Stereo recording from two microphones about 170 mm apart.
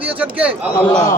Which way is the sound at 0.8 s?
5° left (ahead or behind).